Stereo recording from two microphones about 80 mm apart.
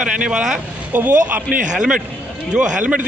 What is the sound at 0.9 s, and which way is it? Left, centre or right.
A man's voice, right.